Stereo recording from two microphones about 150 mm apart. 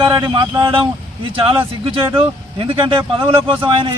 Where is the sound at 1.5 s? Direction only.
35° right (ahead or behind).